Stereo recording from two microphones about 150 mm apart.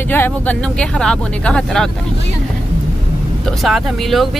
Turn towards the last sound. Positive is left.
turn(degrees=0)  # may be behind; listen again after turning